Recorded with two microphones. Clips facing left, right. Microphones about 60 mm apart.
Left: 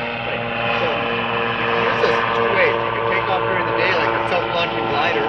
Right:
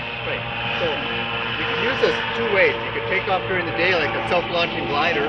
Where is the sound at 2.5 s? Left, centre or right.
Centre.